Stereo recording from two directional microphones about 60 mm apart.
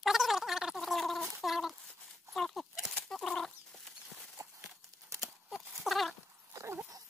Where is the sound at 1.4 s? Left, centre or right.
Centre.